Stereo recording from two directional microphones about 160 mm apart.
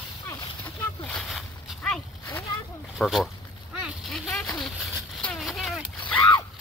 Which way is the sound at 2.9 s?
Centre (ahead or behind).